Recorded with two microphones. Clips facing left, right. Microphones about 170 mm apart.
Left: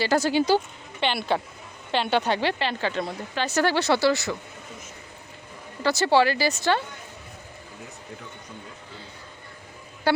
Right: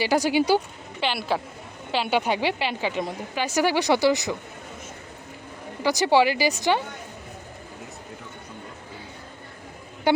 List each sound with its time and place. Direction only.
0.0 s a woman's voice: 15° right (ahead or behind)
5.8 s a woman's voice: 15° right (ahead or behind)